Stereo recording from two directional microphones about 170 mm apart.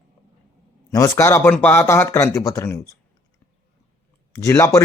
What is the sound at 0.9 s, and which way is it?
A man's voice, 20° left (ahead or behind).